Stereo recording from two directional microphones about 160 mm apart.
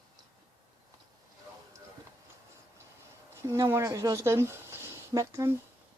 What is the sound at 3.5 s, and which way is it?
Speech, 15° right (ahead or behind).